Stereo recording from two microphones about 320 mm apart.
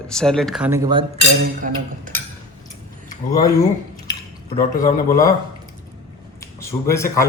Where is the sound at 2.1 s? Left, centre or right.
Right.